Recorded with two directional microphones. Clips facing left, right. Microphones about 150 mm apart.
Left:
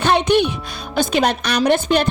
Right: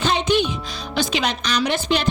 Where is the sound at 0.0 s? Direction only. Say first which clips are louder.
Left 4 dB; 60° left (ahead or behind).